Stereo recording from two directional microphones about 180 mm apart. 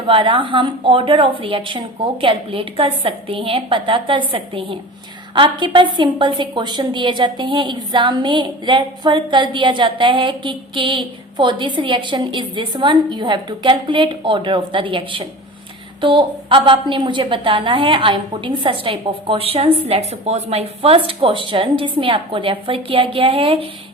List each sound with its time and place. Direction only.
0.1 s a woman's voice: 30° right (ahead or behind)